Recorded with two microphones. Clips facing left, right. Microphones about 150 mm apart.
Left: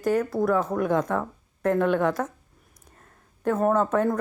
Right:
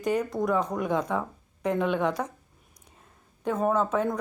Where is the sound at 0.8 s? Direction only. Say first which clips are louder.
Left 3 dB; 10° right (ahead or behind).